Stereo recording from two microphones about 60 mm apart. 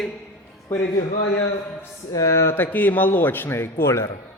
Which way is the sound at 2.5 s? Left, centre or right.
Left.